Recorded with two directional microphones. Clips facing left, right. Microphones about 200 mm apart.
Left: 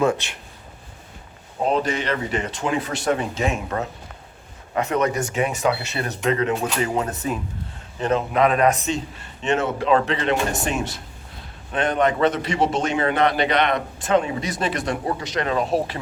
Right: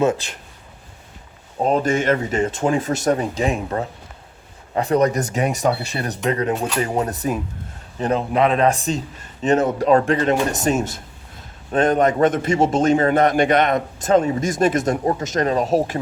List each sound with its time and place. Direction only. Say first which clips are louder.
1.6 s a man's voice: right 4 dB; 45° right (ahead or behind)